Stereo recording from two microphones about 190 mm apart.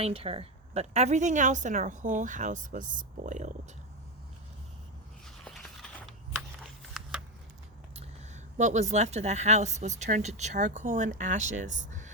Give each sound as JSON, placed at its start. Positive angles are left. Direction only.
{"t": 0.0, "sound": "speech", "side_deg": -30}
{"t": 5.2, "sound": "a sound", "side_deg": 0}
{"t": 8.5, "sound": "speech", "side_deg": -35}